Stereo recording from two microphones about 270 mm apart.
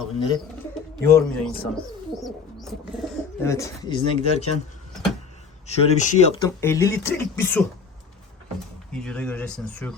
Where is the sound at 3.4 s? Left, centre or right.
Centre.